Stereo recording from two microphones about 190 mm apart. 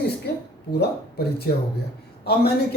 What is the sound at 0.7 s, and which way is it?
Speech, 55° left (ahead or behind).